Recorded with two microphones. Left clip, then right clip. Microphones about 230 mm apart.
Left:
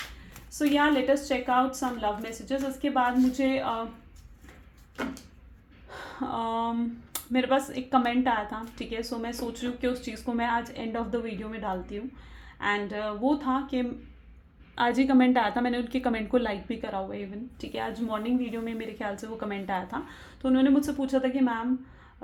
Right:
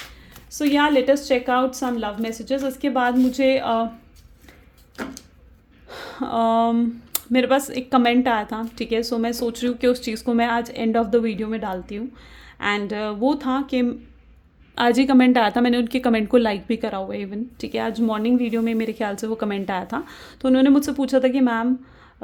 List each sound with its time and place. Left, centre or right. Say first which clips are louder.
0.7 s a woman's voice: right 7 dB; right
5.9 s a woman's voice: right 7 dB; right